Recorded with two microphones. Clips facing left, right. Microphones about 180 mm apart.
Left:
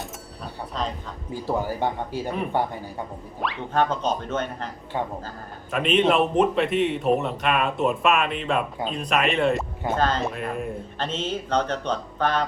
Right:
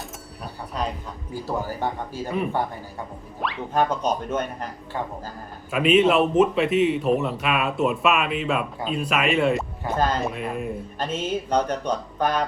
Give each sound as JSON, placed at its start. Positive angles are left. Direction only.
{"t": 0.7, "sound": "a sound", "side_deg": -10}
{"t": 1.5, "sound": "a man's voice", "side_deg": 15}
{"t": 3.4, "sound": "speech", "side_deg": 0}
{"t": 4.9, "sound": "a man's voice", "side_deg": 15}
{"t": 5.8, "sound": "a man's voice", "side_deg": -5}